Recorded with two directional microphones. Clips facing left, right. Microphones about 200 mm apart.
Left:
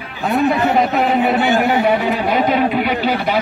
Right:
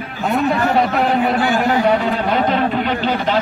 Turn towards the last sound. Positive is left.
turn(degrees=10)  # may be behind; listen again after turning